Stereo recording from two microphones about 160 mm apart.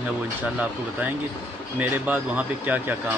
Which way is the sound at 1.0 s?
10° right (ahead or behind).